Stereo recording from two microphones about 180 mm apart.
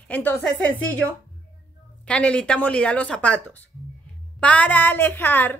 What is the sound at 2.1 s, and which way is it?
Speech, 5° left (ahead or behind).